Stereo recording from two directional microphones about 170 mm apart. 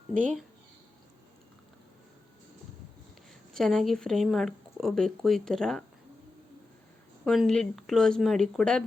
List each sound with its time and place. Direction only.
3.5 s speech: centre (ahead or behind)
7.3 s speech: 5° left (ahead or behind)